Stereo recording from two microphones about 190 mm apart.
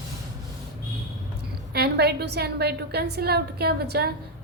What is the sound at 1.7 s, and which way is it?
A woman's voice, 60° right (ahead or behind).